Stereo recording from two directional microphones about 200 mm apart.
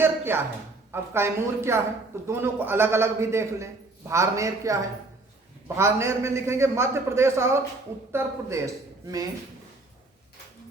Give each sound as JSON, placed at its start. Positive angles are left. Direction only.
{"t": 0.0, "sound": "a woman's voice", "side_deg": -10}